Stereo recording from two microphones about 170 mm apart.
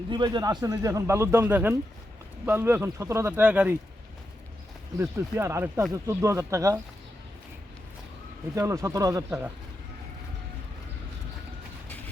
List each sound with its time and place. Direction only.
0.1 s a man's voice: 25° right (ahead or behind); by 3.8 s 10° right (ahead or behind)
4.9 s speech: 15° right (ahead or behind)
8.5 s a man's voice: 15° right (ahead or behind)